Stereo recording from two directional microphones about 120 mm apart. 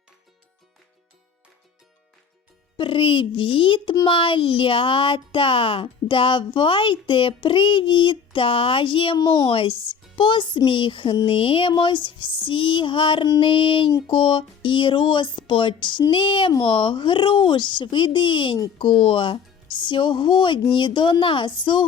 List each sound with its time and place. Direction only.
2.7 s speech: 45° left (ahead or behind)
9.1 s speech: 35° left (ahead or behind)